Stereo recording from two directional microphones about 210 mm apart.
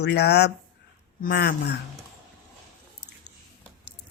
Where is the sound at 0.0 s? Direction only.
50° left (ahead or behind).